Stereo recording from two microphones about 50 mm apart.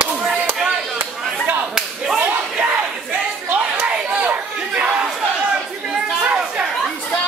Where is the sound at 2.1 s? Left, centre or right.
Right.